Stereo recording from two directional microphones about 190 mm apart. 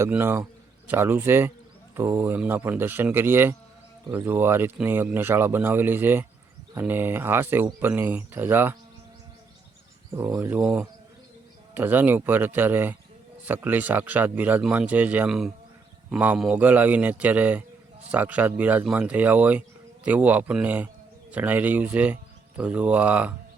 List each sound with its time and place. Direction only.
0.0 s a man's voice: 10° right (ahead or behind)
10.2 s a man's voice: 15° right (ahead or behind)